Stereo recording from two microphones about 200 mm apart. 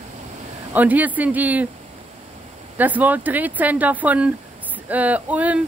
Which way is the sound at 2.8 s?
10° right (ahead or behind).